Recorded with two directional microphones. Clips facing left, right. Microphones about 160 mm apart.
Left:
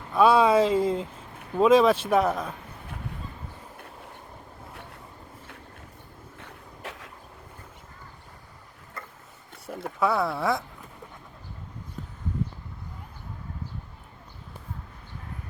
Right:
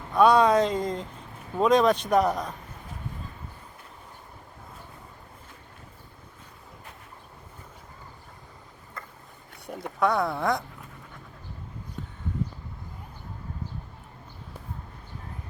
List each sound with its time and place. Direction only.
0.1 s speech: 5° left (ahead or behind)
6.4 s a sound: 90° left
9.6 s speech: centre (ahead or behind)